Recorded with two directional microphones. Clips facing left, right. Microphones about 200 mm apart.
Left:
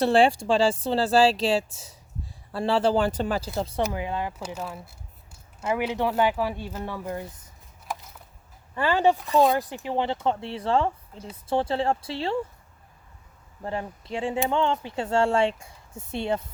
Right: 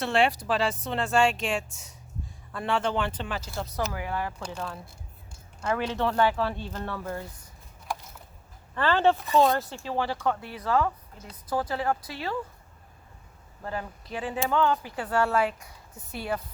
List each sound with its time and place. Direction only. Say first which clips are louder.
0.0 s speech: left 5 dB; 30° left (ahead or behind)
3.5 s speech: left 5 dB; 25° left (ahead or behind)
8.7 s speech: left 1 dB; 10° left (ahead or behind)
13.6 s speech: left 3 dB; 25° left (ahead or behind)